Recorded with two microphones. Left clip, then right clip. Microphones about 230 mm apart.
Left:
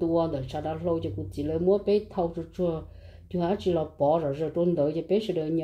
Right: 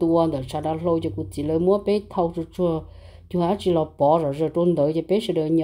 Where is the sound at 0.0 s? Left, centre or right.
Right.